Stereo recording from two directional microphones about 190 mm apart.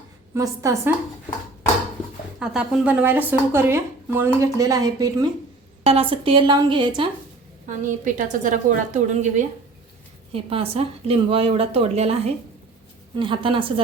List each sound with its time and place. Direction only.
0.3 s speech: 15° right (ahead or behind)
2.4 s speech: 5° right (ahead or behind); by 5.3 s 20° right (ahead or behind)
5.8 s a woman's voice: 30° right (ahead or behind)
7.9 s a woman's voice: 45° right (ahead or behind); by 13.8 s 25° right (ahead or behind)